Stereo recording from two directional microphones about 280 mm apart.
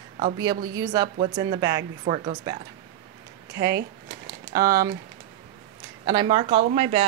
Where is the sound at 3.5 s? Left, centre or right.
Right.